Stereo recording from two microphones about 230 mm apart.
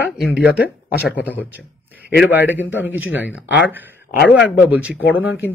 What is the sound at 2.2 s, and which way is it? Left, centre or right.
Speech, centre.